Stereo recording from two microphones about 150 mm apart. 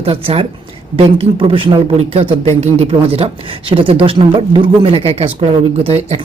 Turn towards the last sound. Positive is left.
turn(degrees=-40)  # may be behind; listen again after turning